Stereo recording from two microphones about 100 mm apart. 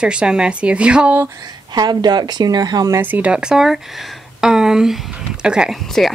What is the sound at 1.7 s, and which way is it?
Speech, 45° right (ahead or behind).